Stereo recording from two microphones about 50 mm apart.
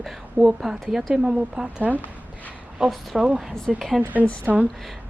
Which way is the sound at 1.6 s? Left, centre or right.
Right.